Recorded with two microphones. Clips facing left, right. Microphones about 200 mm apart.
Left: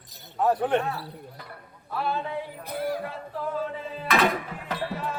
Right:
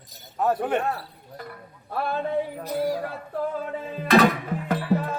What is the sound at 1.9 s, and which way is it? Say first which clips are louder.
Speech: right 1 dB; 50° right (ahead or behind).